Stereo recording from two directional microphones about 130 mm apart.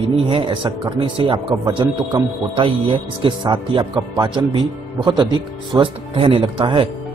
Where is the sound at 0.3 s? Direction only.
40° right (ahead or behind).